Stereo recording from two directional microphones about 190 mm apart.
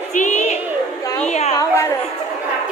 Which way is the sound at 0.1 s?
40° left (ahead or behind).